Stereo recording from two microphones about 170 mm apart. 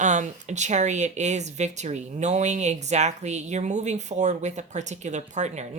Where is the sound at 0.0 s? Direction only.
45° right (ahead or behind).